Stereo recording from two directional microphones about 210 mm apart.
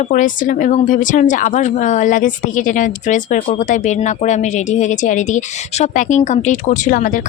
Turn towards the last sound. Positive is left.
turn(degrees=40)  # may be behind; listen again after turning